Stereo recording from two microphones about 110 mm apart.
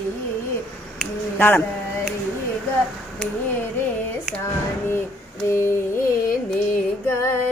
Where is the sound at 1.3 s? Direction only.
15° left (ahead or behind).